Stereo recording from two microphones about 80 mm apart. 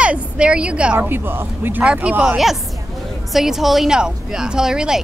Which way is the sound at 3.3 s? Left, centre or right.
Centre.